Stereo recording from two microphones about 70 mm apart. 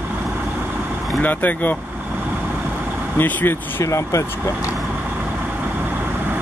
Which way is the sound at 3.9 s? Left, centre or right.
Left.